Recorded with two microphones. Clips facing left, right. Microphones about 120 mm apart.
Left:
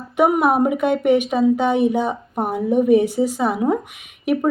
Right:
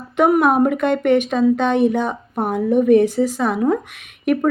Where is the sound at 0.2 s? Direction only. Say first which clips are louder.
Right 2 dB; 15° left (ahead or behind).